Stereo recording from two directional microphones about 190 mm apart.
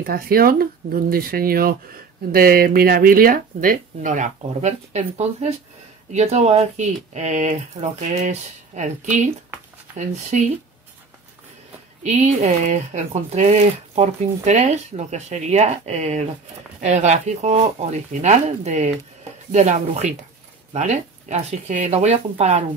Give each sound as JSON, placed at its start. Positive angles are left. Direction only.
{"t": 0.0, "sound": "speech", "side_deg": -50}
{"t": 10.3, "sound": "speech", "side_deg": -40}
{"t": 12.0, "sound": "speech", "side_deg": -35}